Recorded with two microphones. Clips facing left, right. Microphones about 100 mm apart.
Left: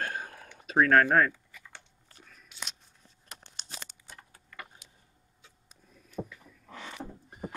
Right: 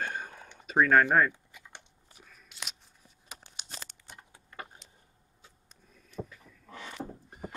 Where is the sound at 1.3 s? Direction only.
20° right (ahead or behind).